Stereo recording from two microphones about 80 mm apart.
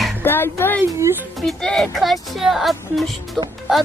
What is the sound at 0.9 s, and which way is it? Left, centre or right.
Speech, right.